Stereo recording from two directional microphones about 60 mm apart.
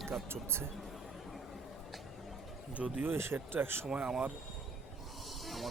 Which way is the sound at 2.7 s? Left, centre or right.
Right.